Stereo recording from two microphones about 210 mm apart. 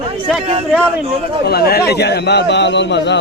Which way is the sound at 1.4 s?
50° left (ahead or behind).